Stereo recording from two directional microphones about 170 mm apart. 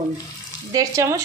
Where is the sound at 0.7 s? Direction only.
20° right (ahead or behind).